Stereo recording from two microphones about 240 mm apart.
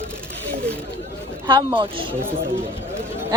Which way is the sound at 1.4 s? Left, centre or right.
Centre.